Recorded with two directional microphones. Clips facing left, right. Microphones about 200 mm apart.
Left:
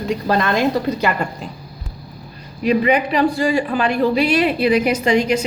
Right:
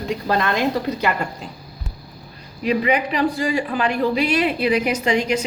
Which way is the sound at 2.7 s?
45° left (ahead or behind).